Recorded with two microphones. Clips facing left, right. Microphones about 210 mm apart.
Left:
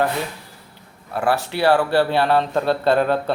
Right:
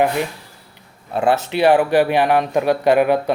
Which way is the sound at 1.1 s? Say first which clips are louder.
Right 3 dB; 20° right (ahead or behind).